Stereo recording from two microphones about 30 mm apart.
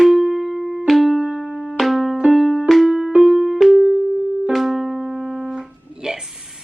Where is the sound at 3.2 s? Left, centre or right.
Centre.